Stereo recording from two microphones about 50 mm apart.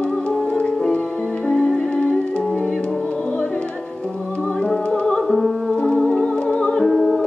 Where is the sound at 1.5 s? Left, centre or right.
Centre.